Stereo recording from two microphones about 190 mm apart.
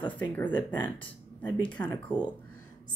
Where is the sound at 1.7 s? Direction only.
10° left (ahead or behind).